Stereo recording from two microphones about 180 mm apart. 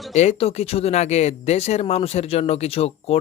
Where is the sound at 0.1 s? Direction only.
40° left (ahead or behind).